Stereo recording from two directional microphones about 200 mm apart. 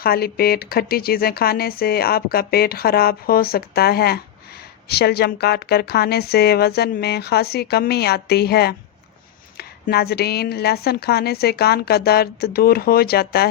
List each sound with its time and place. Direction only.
0.0 s speech: 50° left (ahead or behind)